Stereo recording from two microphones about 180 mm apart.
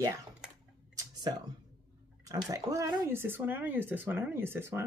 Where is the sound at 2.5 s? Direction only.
20° right (ahead or behind).